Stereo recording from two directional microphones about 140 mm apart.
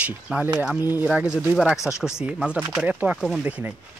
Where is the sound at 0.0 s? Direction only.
10° right (ahead or behind).